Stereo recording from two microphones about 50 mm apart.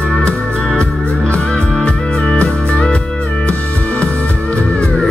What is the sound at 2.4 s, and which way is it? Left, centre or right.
Music, left.